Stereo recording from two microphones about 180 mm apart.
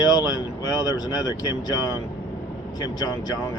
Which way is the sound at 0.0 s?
20° left (ahead or behind).